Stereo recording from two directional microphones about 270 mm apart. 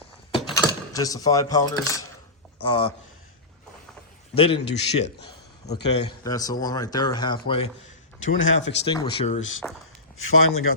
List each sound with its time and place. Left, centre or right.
0.3 s a man's voice: centre
4.4 s a man's voice: left
8.4 s speech: left
8.9 s a man's voice: centre
9.6 s speech: centre
10.2 s speech: left